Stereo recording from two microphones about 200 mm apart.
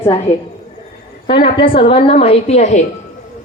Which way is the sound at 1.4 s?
25° left (ahead or behind).